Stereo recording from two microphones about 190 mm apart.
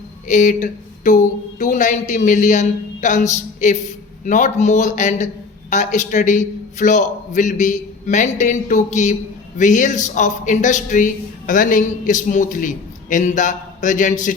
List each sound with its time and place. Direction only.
0.3 s a man's voice: 40° left (ahead or behind)